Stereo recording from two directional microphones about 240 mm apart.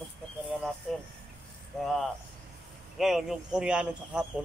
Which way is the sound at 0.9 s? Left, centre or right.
Centre.